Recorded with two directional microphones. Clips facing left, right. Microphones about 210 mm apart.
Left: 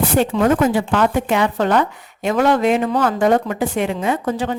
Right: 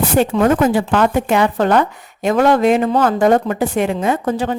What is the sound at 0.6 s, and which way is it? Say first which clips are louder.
Speech: right 2 dB; 45° right (ahead or behind).